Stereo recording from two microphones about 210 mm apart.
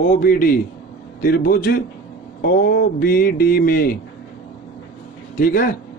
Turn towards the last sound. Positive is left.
turn(degrees=45)  # may be behind; listen again after turning